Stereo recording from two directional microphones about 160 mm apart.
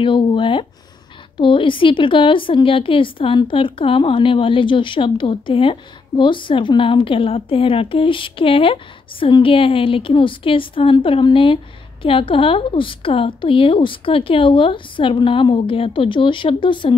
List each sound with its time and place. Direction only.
0.0 s a woman's voice: 30° left (ahead or behind)